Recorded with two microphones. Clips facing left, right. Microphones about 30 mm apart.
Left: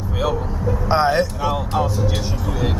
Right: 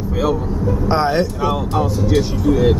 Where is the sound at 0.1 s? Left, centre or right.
Centre.